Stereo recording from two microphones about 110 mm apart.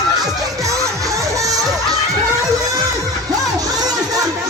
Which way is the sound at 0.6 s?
30° right (ahead or behind).